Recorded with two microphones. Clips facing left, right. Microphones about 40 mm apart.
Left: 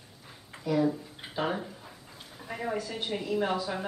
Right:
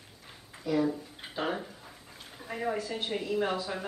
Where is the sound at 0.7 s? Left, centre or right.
Centre.